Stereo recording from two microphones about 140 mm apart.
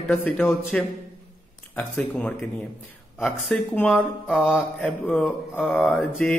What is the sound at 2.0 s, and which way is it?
Speech, 5° left (ahead or behind).